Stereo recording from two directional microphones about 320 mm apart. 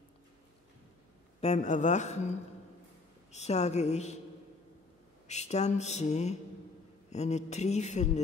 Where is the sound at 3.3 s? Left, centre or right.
Left.